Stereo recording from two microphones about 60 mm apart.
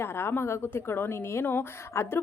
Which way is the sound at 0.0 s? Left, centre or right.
Left.